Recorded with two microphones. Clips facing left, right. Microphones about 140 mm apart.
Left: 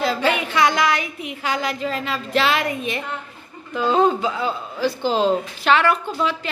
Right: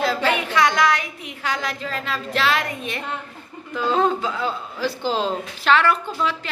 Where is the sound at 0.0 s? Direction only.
Centre (ahead or behind).